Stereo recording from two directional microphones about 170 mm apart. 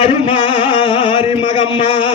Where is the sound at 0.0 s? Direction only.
35° left (ahead or behind).